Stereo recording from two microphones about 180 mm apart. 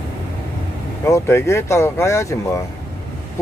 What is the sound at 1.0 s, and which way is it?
Speech, 15° left (ahead or behind).